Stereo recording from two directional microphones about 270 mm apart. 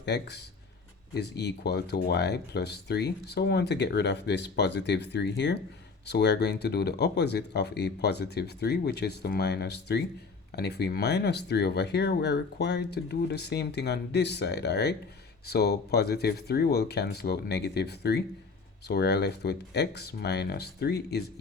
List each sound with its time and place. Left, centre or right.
0.0 s speech: left